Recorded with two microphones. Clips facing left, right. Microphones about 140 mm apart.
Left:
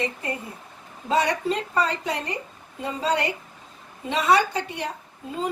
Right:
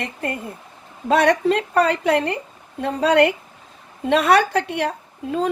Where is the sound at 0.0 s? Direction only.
65° right (ahead or behind).